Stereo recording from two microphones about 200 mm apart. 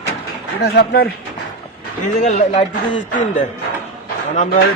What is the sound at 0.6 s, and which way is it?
Speech, 50° left (ahead or behind).